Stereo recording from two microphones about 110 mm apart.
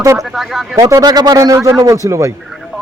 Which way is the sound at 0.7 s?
30° right (ahead or behind).